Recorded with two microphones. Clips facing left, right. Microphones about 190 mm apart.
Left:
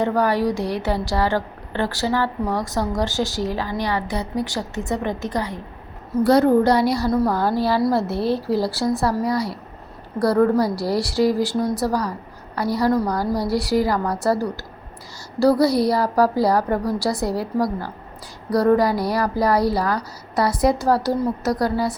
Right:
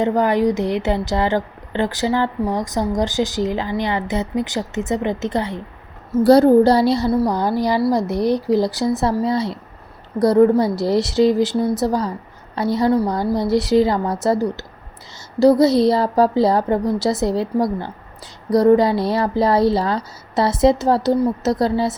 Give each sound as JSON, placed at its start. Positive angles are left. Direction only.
{"t": 0.0, "sound": "a woman's voice", "side_deg": -20}